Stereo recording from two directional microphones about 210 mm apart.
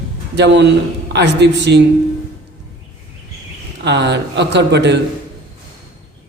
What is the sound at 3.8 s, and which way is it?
A man's voice, 55° right (ahead or behind).